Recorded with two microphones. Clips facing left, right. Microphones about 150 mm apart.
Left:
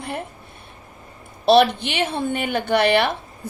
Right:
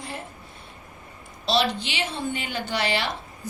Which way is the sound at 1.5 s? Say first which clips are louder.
Left 9 dB; 55° left (ahead or behind).